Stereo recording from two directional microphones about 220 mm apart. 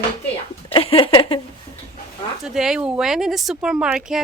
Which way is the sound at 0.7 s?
25° left (ahead or behind).